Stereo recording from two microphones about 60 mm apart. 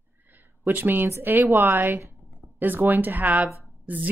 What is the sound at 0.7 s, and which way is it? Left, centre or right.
A woman's voice, right.